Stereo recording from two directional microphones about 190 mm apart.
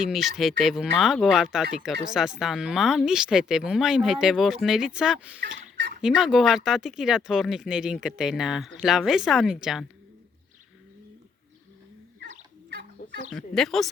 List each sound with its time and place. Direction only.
0.0 s speech: centre (ahead or behind)
5.4 s fowl: 45° right (ahead or behind)
6.0 s speech: 5° right (ahead or behind)
13.3 s speech: centre (ahead or behind)